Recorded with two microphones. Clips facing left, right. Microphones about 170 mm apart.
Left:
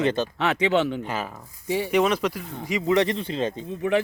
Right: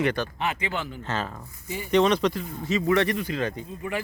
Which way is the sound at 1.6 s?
70° left (ahead or behind).